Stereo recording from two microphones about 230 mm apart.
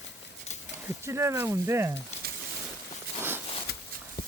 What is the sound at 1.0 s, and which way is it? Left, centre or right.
Speech, centre.